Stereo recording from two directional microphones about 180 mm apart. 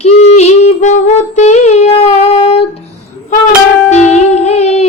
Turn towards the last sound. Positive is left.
turn(degrees=35)  # may be behind; listen again after turning